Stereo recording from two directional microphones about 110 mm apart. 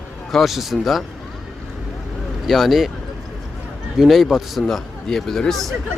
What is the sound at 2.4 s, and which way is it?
Speech, centre (ahead or behind).